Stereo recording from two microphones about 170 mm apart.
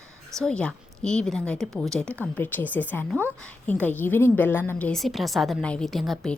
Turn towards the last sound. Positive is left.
turn(degrees=0)  # may be behind; listen again after turning